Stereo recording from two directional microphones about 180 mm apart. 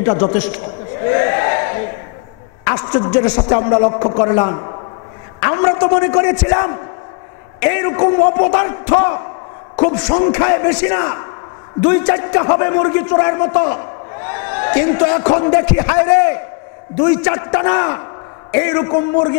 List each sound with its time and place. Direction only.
0.0 s a man's voice: 15° left (ahead or behind)
1.1 s battle cry: 20° left (ahead or behind)
2.6 s a man's voice: 25° left (ahead or behind)
4.2 s a man's voice: 20° left (ahead or behind)